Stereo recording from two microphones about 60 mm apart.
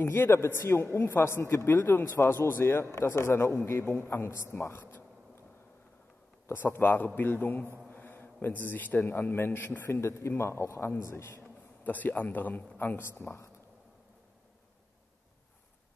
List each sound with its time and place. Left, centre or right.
0.0 s a man's voice: left
6.4 s a man's voice: left
9.8 s a man's voice: left
11.8 s a man's voice: left